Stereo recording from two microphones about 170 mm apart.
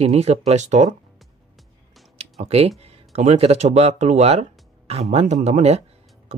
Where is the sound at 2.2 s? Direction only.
40° right (ahead or behind).